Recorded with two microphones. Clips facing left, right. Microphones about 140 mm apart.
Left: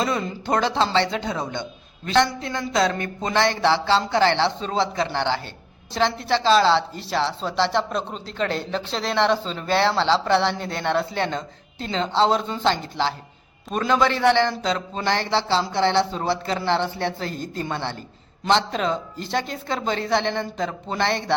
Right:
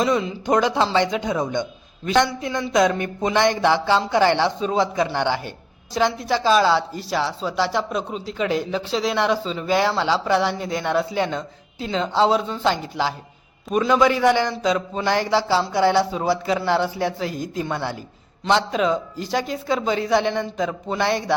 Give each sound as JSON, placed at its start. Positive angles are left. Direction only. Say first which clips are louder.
{"t": 0.0, "sound": "a woman's voice", "louder": "right 4 dB", "side_deg": -5}